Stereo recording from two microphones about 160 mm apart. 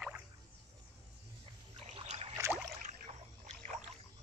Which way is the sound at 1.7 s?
40° right (ahead or behind).